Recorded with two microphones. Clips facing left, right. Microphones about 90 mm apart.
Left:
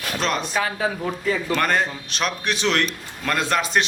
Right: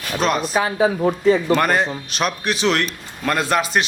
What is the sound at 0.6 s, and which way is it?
Speech, 25° right (ahead or behind).